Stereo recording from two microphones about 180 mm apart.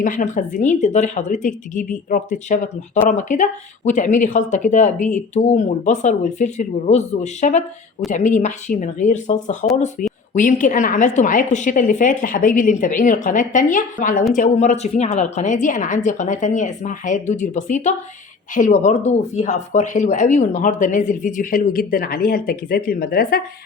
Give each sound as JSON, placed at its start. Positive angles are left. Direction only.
{"t": 0.0, "sound": "speech", "side_deg": 45}